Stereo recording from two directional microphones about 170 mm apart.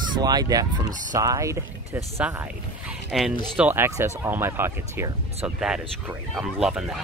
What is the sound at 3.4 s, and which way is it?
Speech, 10° right (ahead or behind).